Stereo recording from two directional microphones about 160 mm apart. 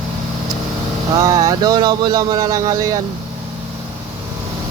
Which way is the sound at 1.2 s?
20° right (ahead or behind).